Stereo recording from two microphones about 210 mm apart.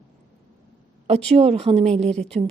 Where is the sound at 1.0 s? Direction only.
30° right (ahead or behind).